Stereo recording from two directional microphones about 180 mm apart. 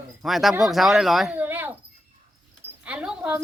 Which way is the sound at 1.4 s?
10° right (ahead or behind).